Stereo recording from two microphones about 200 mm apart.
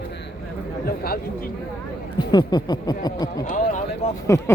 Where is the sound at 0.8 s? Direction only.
50° left (ahead or behind).